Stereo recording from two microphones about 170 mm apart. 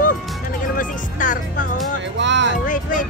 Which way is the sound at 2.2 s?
90° right.